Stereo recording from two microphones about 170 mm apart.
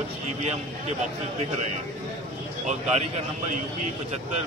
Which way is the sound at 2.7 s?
40° right (ahead or behind).